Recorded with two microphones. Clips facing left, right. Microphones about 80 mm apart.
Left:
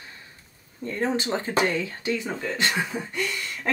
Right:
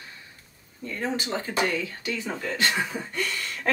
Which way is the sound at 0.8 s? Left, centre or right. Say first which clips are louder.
Left 4 dB; left.